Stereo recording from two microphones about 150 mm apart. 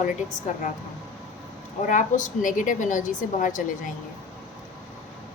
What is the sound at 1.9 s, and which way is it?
A woman's voice, 60° left (ahead or behind).